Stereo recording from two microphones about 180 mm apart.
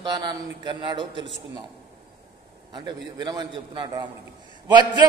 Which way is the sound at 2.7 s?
25° right (ahead or behind).